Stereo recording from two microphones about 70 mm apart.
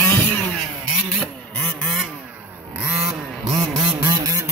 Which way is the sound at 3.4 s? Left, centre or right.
Right.